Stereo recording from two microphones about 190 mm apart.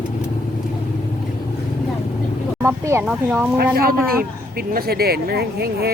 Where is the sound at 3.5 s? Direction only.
50° right (ahead or behind).